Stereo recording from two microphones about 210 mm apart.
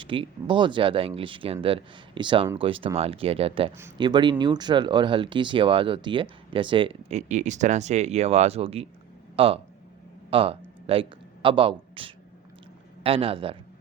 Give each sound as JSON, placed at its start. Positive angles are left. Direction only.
{"t": 0.0, "sound": "a man's voice", "side_deg": -25}